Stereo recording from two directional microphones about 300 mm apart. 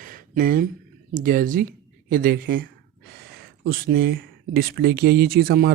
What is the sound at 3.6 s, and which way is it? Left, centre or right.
Speech, right.